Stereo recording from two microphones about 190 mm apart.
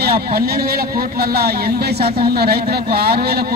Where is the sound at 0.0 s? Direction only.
55° right (ahead or behind).